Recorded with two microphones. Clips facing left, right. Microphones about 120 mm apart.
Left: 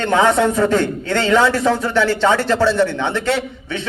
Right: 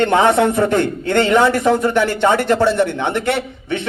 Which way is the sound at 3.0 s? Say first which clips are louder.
Right 1 dB; 55° right (ahead or behind).